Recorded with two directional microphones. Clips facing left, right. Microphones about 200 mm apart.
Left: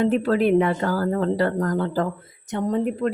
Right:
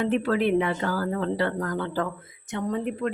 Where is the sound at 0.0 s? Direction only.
35° left (ahead or behind).